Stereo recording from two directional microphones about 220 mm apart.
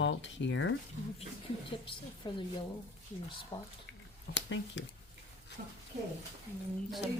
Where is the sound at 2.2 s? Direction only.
20° left (ahead or behind).